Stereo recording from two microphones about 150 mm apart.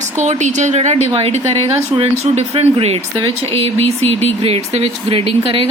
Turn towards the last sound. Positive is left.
turn(degrees=-35)  # may be behind; listen again after turning